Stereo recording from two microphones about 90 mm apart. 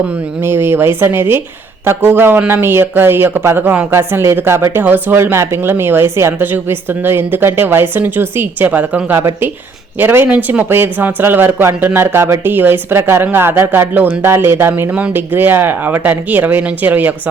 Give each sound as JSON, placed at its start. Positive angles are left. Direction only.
{"t": 0.4, "sound": "speech", "side_deg": -25}
{"t": 4.8, "sound": "speech", "side_deg": -20}
{"t": 9.1, "sound": "speech", "side_deg": -25}
{"t": 10.2, "sound": "speech", "side_deg": -15}